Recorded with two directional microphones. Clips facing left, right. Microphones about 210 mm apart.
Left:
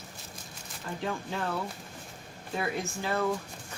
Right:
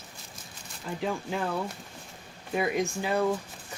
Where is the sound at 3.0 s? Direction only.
15° right (ahead or behind).